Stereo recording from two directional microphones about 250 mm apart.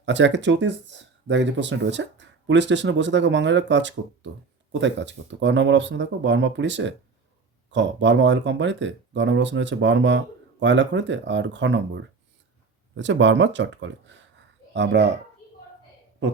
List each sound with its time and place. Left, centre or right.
0.0 s speech: right